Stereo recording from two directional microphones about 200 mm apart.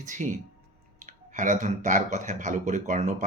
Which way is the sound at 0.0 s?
40° right (ahead or behind).